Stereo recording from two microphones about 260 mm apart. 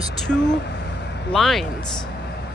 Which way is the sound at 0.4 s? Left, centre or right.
Left.